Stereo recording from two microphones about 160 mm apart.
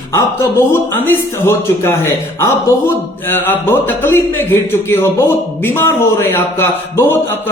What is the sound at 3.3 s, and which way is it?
Speech, 15° left (ahead or behind).